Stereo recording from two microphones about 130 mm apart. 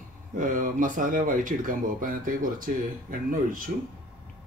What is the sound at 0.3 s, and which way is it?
Speech, 90° right.